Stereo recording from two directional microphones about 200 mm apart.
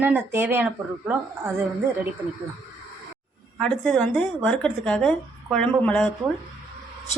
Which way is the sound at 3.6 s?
5° left (ahead or behind).